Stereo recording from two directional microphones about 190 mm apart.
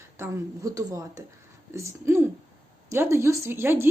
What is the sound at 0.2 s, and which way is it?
A woman's voice, 15° right (ahead or behind).